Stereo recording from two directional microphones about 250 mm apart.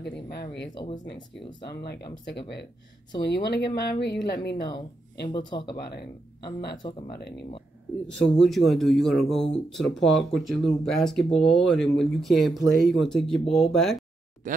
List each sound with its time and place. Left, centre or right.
0.0 s speech: left
0.7 s speech: centre
1.7 s speech: left
3.4 s speech: left
5.3 s speech: centre
5.8 s speech: left
6.8 s speech: left
7.1 s speech: left
8.4 s speech: centre